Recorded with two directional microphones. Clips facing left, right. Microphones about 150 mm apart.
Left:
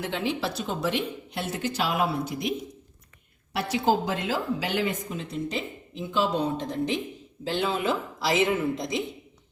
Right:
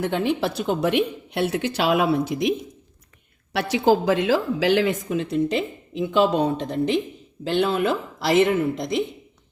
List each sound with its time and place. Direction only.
0.0 s a woman's voice: 55° right (ahead or behind); by 2.5 s 90° right
3.5 s a woman's voice: 90° right; by 8.4 s 60° right (ahead or behind)